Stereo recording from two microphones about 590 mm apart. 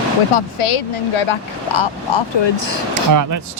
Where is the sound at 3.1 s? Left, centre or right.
Right.